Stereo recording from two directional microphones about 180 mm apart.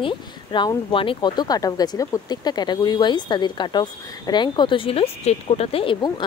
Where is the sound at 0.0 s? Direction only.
25° left (ahead or behind).